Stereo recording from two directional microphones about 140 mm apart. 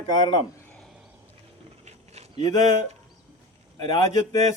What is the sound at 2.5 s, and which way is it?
Speech, 25° left (ahead or behind).